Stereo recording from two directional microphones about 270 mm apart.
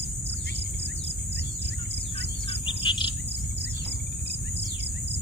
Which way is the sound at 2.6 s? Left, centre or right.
Centre.